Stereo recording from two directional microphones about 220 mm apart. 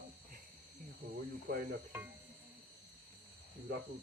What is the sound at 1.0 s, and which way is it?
Speech, 40° right (ahead or behind).